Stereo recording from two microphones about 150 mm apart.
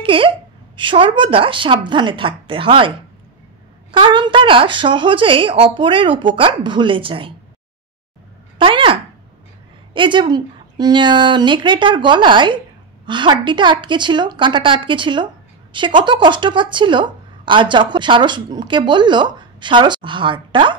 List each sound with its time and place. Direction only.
0.0 s a woman's voice: 35° right (ahead or behind)
3.9 s a woman's voice: 30° right (ahead or behind)
8.5 s a woman's voice: 35° right (ahead or behind)